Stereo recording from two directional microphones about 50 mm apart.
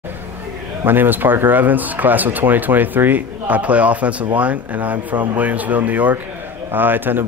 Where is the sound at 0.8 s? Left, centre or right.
Right.